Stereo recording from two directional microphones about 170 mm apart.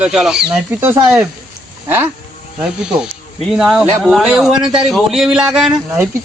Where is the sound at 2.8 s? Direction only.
5° right (ahead or behind).